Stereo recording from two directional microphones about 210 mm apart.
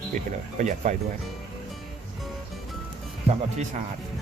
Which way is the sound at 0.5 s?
35° right (ahead or behind).